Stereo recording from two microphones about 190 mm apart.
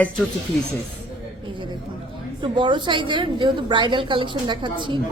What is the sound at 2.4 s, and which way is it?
A woman's voice, 25° right (ahead or behind).